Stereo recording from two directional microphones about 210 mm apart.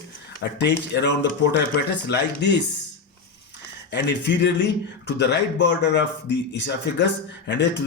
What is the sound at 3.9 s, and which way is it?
Speech, 60° left (ahead or behind).